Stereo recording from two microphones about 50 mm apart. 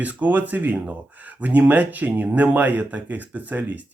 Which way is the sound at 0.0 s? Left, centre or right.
Right.